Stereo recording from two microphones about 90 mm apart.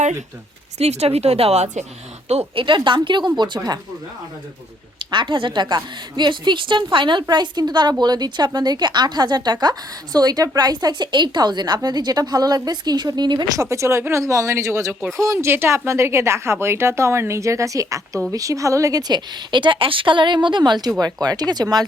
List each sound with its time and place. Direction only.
0.8 s speech: 90° right
2.6 s a woman's voice: 65° right (ahead or behind)
4.9 s a woman's voice: 65° right (ahead or behind)
13.6 s speech: 35° right (ahead or behind)
15.4 s a woman's voice: 25° right (ahead or behind); by 20.7 s 60° right (ahead or behind)
21.0 s a woman's voice: 45° right (ahead or behind)